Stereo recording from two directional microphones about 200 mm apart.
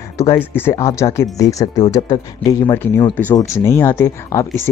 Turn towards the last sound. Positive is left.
turn(degrees=10)  # may be behind; listen again after turning